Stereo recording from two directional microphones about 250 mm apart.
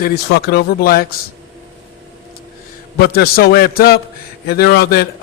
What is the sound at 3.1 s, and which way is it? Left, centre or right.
A man's voice, left.